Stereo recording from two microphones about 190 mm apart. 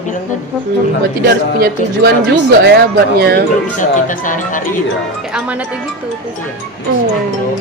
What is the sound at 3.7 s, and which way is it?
Speech, 45° left (ahead or behind).